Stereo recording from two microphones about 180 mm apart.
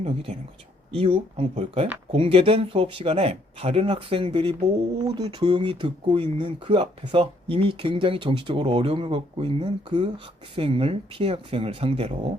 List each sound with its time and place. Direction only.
0.9 s speech: 30° right (ahead or behind)